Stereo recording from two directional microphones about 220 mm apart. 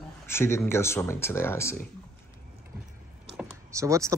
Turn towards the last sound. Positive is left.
turn(degrees=-15)  # may be behind; listen again after turning